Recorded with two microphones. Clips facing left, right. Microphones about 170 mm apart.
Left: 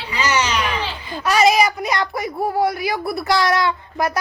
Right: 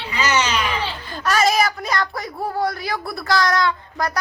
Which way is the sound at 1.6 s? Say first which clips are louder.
Left 2 dB; 20° left (ahead or behind).